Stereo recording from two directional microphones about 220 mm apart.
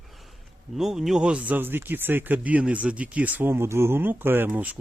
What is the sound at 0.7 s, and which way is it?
Speech, centre (ahead or behind).